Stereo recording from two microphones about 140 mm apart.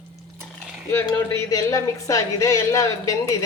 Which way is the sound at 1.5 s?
20° left (ahead or behind).